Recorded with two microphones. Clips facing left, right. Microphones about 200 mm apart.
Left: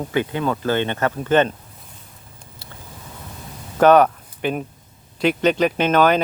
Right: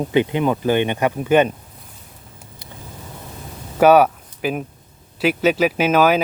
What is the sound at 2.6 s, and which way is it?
Vehicle, 15° right (ahead or behind).